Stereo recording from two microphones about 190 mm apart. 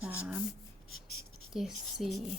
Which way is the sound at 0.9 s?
90° left.